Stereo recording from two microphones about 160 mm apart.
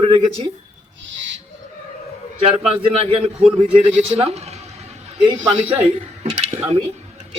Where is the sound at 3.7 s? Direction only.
35° right (ahead or behind).